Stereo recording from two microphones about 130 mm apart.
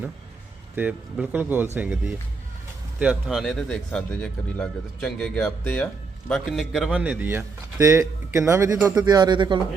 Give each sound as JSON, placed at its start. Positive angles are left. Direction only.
{"t": 0.8, "sound": "speech", "side_deg": -10}